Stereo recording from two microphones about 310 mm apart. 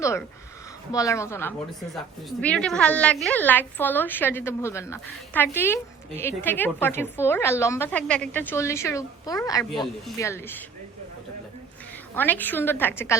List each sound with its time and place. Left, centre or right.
0.0 s a woman's voice: centre
12.1 s a woman's voice: centre